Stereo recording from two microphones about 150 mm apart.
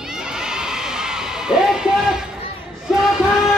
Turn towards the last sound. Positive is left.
turn(degrees=-5)  # may be behind; listen again after turning